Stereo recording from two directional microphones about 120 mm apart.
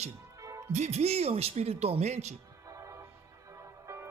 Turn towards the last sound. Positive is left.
turn(degrees=-25)  # may be behind; listen again after turning